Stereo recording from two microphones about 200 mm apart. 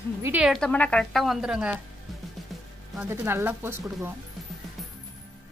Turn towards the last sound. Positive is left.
turn(degrees=-10)  # may be behind; listen again after turning